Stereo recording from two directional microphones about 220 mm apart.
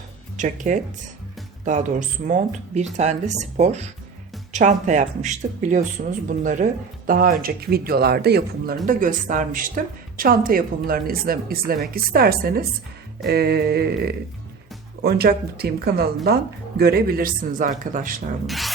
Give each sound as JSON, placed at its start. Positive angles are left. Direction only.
{"t": 0.3, "sound": "a woman's voice", "side_deg": -35}
{"t": 18.4, "sound": "rub", "side_deg": 0}